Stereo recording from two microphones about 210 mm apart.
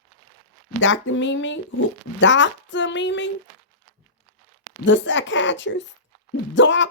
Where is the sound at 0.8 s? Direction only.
65° left (ahead or behind).